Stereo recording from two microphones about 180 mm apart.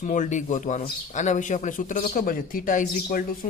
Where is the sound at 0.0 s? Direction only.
45° left (ahead or behind).